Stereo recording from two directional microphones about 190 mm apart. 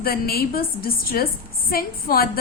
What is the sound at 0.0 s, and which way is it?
A woman's voice, 50° left (ahead or behind).